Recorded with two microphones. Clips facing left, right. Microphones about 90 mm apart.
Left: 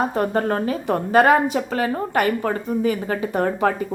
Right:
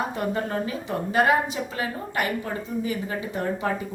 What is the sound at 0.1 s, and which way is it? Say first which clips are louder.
A woman's voice: left 6 dB; 50° left (ahead or behind).